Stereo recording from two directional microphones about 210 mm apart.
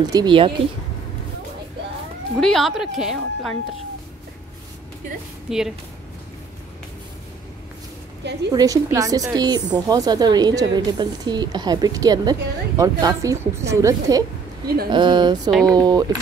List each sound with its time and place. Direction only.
0.0 s speech: 20° right (ahead or behind)
2.3 s a woman's voice: centre (ahead or behind)
5.5 s a woman's voice: 5° right (ahead or behind)
8.5 s speech: 15° right (ahead or behind)